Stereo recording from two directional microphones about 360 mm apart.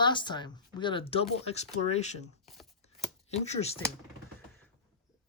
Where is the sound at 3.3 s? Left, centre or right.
Centre.